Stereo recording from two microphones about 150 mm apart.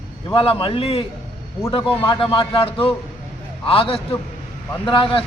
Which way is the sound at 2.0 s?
35° left (ahead or behind).